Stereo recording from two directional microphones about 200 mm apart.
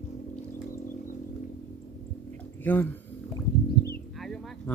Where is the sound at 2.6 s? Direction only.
10° left (ahead or behind).